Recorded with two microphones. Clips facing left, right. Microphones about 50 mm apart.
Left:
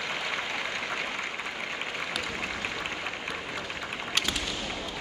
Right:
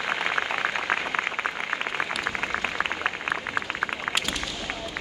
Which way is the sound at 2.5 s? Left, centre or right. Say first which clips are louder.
Right 6 dB; right.